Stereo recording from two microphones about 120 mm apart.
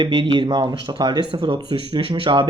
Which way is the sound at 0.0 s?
40° right (ahead or behind).